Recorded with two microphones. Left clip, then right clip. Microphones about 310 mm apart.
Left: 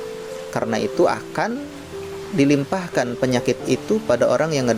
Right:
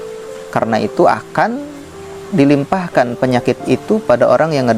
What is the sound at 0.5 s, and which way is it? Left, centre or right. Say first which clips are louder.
Speech: right 7 dB; right.